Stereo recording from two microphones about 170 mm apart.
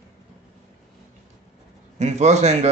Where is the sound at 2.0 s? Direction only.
40° right (ahead or behind).